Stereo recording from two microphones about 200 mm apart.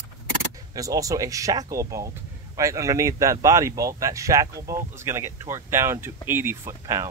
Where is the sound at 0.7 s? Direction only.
15° right (ahead or behind).